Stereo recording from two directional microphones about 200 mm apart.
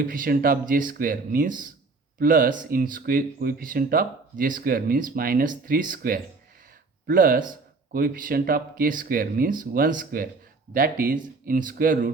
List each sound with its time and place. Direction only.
0.0 s speech: 45° right (ahead or behind)